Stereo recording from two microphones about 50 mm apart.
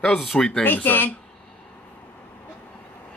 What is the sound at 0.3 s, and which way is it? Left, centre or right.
Speech, centre.